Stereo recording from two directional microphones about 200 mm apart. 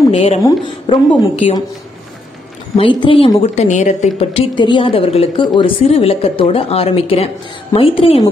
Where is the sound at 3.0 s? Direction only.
25° left (ahead or behind).